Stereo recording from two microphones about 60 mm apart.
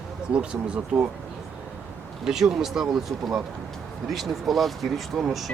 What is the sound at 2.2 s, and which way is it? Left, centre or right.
Speech, centre.